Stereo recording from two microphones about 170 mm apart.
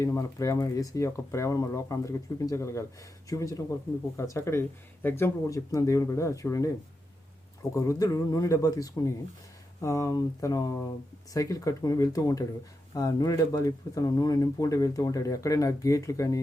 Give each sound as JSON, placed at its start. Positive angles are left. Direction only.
{"t": 0.0, "sound": "speech", "side_deg": 20}